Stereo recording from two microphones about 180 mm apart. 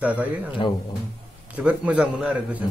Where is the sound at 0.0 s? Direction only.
10° right (ahead or behind).